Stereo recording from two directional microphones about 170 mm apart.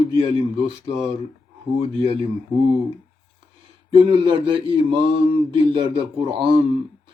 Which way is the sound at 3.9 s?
30° right (ahead or behind).